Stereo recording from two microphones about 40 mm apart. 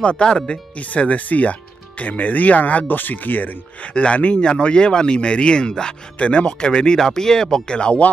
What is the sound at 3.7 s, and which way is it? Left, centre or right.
Speech, left.